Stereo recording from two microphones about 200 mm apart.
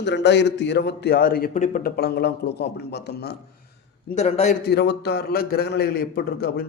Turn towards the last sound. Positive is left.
turn(degrees=50)  # may be behind; listen again after turning